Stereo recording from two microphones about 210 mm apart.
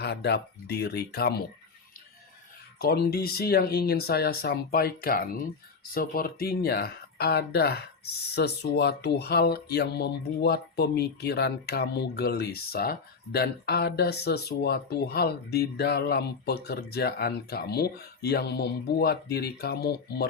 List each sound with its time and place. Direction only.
0.0 s speech: 50° left (ahead or behind)
2.7 s speech: 50° left (ahead or behind)